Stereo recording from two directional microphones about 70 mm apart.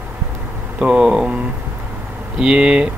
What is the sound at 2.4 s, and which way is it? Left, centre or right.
Speech, centre.